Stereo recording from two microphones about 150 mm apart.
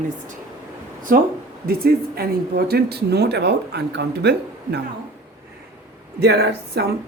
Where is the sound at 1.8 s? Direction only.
90° right.